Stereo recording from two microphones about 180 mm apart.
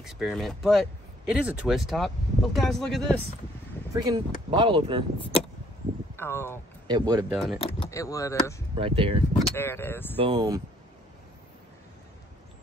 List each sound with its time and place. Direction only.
0.0 s speech: centre (ahead or behind)
3.9 s speech: 25° right (ahead or behind)
6.1 s speech: 15° left (ahead or behind)
6.9 s speech: 20° right (ahead or behind)
7.2 s speech: centre (ahead or behind)
7.9 s speech: 20° left (ahead or behind)
8.7 s speech: 30° right (ahead or behind)
9.6 s speech: 10° left (ahead or behind)
10.1 s speech: 30° right (ahead or behind)